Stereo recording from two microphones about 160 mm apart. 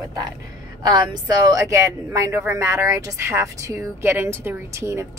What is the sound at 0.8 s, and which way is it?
A woman's voice, 25° right (ahead or behind).